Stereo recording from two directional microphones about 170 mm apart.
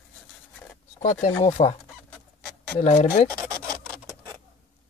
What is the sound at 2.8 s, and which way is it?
Speech, 40° left (ahead or behind).